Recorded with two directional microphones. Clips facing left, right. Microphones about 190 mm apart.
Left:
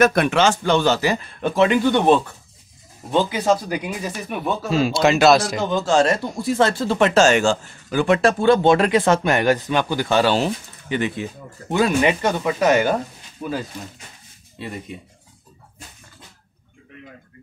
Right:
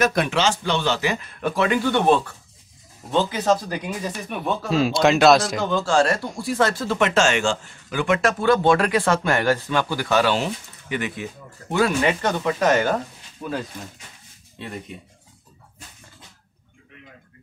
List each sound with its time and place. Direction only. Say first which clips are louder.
0.0 s speech: left 4 dB; 55° left (ahead or behind); by 5.7 s centre (ahead or behind)
5.7 s speech: left 2 dB; 20° left (ahead or behind)
11.7 s speech: left 2 dB; 15° left (ahead or behind)